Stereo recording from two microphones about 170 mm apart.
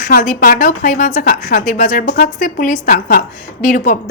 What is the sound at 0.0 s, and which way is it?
A woman's voice, 55° left (ahead or behind).